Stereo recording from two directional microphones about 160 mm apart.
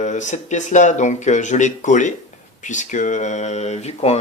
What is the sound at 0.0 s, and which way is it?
Speech, 50° left (ahead or behind).